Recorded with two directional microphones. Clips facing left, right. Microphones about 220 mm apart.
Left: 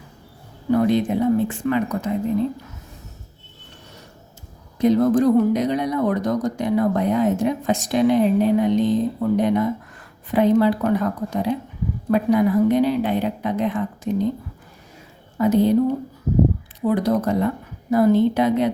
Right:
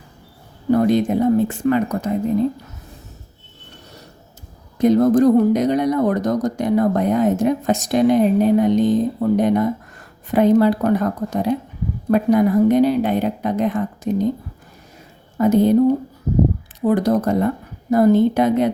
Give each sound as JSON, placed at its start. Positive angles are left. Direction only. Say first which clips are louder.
{"t": 0.7, "sound": "speech", "louder": "right 2 dB", "side_deg": -45}
{"t": 4.8, "sound": "speech", "louder": "right 3 dB", "side_deg": -45}
{"t": 15.4, "sound": "speech", "louder": "right 2 dB", "side_deg": -45}
{"t": 16.8, "sound": "speech", "louder": "right 3 dB", "side_deg": -45}